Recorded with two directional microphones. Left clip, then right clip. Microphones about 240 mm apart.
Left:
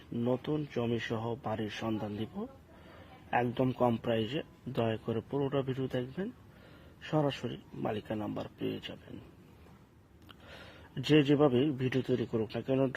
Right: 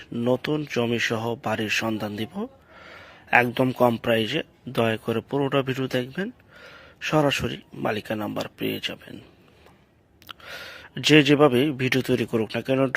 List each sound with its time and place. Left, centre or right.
0.1 s speech: centre
10.3 s a sound: centre
10.9 s speech: centre